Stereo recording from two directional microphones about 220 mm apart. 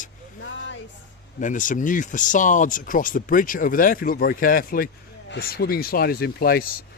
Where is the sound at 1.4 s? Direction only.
35° left (ahead or behind).